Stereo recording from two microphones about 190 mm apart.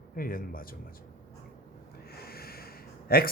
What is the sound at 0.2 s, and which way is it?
Speech, 50° left (ahead or behind).